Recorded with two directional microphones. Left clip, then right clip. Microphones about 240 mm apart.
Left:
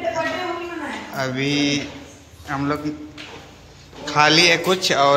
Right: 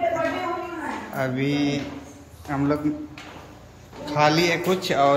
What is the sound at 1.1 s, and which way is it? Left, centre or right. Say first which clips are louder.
A man's voice: left 3 dB; centre.